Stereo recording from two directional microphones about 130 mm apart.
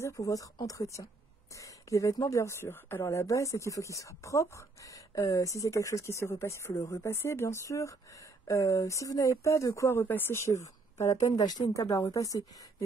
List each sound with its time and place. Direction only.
0.0 s speech: 25° left (ahead or behind)